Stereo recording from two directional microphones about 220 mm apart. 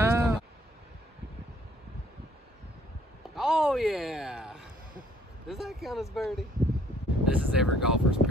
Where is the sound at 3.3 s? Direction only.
Centre (ahead or behind).